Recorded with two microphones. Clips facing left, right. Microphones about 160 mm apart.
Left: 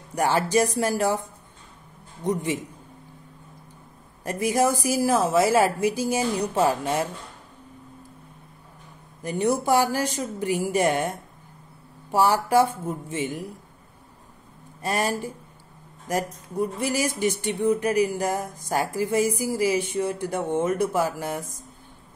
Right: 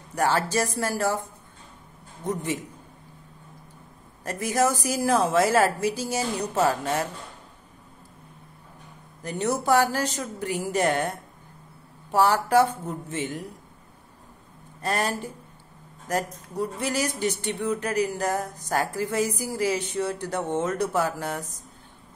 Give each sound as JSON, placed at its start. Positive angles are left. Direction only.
{"t": 0.1, "sound": "speech", "side_deg": 15}
{"t": 2.2, "sound": "speech", "side_deg": 15}
{"t": 4.2, "sound": "speech", "side_deg": 15}
{"t": 9.2, "sound": "speech", "side_deg": 10}
{"t": 14.8, "sound": "speech", "side_deg": 10}